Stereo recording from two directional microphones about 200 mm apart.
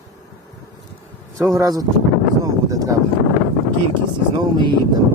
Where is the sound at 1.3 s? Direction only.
15° right (ahead or behind).